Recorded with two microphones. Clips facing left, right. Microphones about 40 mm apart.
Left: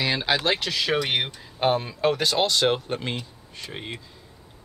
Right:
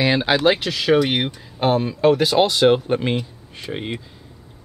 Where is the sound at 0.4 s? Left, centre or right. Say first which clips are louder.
Right 6 dB; centre.